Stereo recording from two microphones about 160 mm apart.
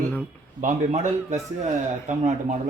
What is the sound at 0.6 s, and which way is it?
A man's voice, 45° right (ahead or behind).